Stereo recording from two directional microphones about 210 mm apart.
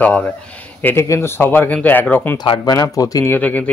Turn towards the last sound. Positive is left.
turn(degrees=5)  # may be behind; listen again after turning